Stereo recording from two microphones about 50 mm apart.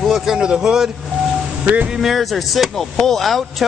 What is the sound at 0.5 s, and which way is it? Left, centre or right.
Speech, centre.